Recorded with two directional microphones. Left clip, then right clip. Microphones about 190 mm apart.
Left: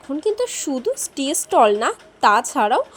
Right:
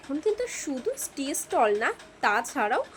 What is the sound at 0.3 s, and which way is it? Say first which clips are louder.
A woman's voice: left 8 dB; 25° left (ahead or behind).